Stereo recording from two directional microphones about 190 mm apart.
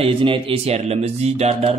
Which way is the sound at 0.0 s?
30° right (ahead or behind).